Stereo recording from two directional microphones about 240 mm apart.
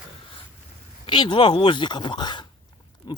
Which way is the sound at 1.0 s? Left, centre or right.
Centre.